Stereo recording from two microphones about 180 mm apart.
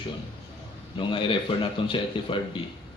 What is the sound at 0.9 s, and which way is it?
Speech, 30° left (ahead or behind).